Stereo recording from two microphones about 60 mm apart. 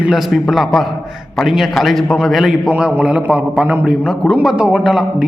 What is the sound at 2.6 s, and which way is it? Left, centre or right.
A man's voice, centre.